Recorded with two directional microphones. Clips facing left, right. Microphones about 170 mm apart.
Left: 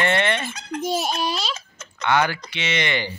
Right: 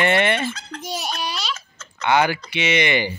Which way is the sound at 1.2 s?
45° left (ahead or behind).